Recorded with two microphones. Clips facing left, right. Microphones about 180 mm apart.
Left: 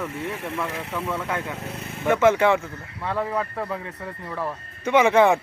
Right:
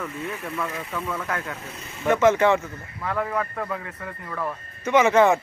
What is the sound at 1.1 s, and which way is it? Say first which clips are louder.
A man's voice: left 2 dB; 10° left (ahead or behind).